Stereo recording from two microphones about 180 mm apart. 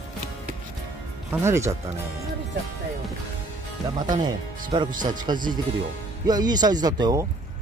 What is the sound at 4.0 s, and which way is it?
Speech, 25° right (ahead or behind).